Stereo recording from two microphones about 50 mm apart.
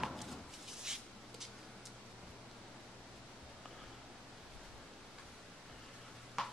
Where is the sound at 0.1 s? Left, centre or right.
Centre.